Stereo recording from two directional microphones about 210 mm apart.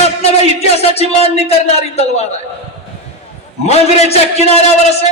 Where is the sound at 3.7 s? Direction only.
30° left (ahead or behind).